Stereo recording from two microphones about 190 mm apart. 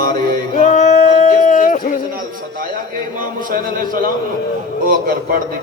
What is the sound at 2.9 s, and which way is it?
Music, 45° right (ahead or behind).